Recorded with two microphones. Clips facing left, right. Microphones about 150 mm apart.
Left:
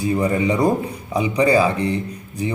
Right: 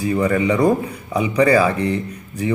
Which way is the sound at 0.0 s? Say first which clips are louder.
Right 1 dB; 30° left (ahead or behind).